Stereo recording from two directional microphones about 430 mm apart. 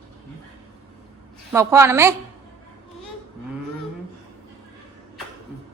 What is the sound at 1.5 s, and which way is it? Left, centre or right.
Speech, centre.